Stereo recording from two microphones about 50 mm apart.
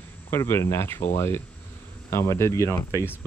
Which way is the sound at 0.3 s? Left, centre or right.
Left.